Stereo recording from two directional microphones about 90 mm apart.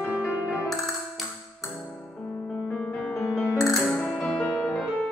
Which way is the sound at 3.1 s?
25° left (ahead or behind).